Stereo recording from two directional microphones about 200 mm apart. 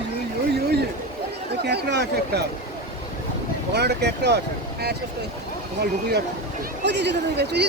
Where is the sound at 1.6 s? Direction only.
60° right (ahead or behind).